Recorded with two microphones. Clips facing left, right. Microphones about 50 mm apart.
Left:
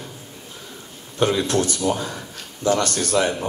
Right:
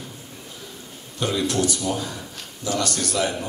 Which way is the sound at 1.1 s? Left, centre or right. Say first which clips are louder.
Left 4 dB; left.